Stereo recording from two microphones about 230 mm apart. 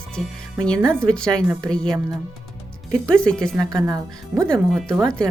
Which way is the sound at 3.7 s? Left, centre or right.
Centre.